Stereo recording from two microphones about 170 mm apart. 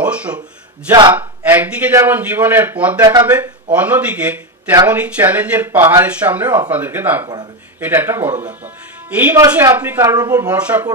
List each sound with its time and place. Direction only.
0.0 s a sound: 5° right (ahead or behind)
1.1 s a man's voice: 10° right (ahead or behind)
10.5 s speech: 10° right (ahead or behind)